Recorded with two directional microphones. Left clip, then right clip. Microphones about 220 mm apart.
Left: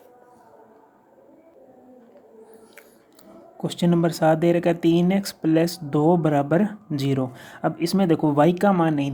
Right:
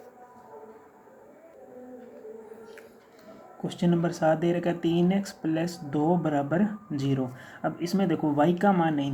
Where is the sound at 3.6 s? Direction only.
50° left (ahead or behind).